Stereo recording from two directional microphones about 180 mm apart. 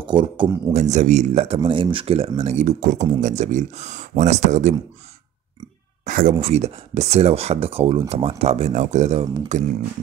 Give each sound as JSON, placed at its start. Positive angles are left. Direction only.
{"t": 0.0, "sound": "speech", "side_deg": -25}
{"t": 0.7, "sound": "speech", "side_deg": -40}
{"t": 6.0, "sound": "speech", "side_deg": -45}